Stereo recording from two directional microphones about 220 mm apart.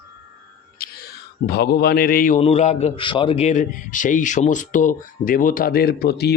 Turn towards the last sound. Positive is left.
turn(degrees=45)  # may be behind; listen again after turning